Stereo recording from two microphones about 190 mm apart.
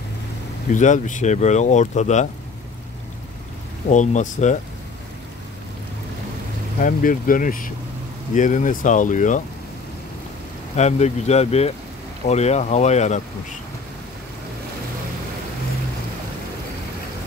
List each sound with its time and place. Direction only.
0.7 s speech: 40° left (ahead or behind)
3.9 s speech: 40° left (ahead or behind)
6.8 s speech: 45° left (ahead or behind)
10.8 s speech: 35° left (ahead or behind)